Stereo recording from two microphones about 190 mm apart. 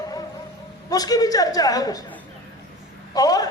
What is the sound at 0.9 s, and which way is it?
A man's voice, 20° left (ahead or behind).